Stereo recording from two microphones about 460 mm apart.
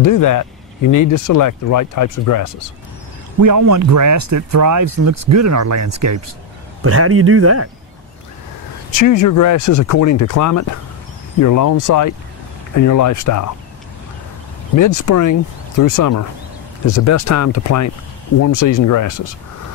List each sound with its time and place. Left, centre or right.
0.0 s speech: left
3.3 s speech: right
8.9 s speech: left
14.8 s speech: left